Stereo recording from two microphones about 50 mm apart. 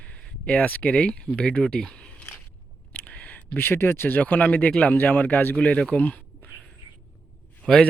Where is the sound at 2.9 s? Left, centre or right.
Left.